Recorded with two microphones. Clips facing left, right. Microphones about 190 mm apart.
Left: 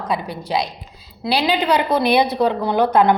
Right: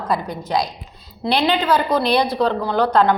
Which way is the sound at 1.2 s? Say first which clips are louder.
Right 1 dB; 10° left (ahead or behind).